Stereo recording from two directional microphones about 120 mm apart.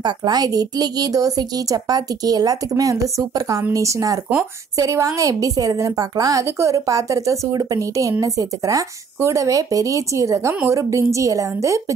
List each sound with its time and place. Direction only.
0.0 s a woman's voice: 35° right (ahead or behind)